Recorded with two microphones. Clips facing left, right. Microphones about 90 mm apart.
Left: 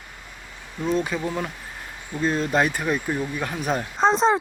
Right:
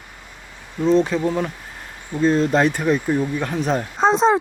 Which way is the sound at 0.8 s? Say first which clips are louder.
Right 7 dB; 5° left (ahead or behind).